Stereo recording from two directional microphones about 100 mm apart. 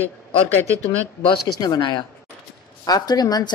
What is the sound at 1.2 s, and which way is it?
A woman's voice, 50° left (ahead or behind).